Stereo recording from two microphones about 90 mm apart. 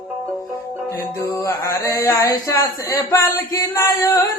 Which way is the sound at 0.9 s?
35° left (ahead or behind).